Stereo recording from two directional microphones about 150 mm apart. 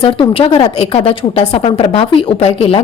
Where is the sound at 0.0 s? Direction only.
35° left (ahead or behind).